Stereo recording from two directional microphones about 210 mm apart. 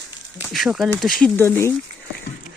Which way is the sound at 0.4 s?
Centre (ahead or behind).